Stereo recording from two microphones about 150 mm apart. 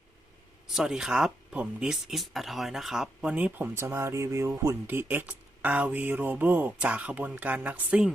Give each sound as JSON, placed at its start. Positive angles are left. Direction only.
{"t": 0.7, "sound": "speech", "side_deg": -5}